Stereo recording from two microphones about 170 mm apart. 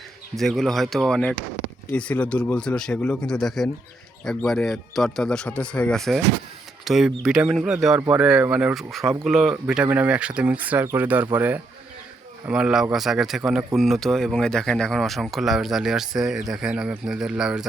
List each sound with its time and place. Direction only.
0.3 s speech: centre (ahead or behind)